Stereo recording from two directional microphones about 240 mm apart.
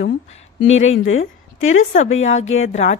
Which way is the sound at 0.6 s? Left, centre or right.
Left.